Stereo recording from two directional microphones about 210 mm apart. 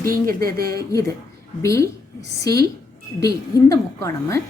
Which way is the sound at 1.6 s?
15° left (ahead or behind).